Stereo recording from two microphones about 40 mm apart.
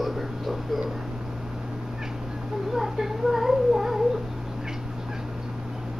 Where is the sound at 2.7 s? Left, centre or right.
Centre.